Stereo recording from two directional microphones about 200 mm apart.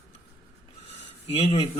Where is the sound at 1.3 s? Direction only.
30° left (ahead or behind).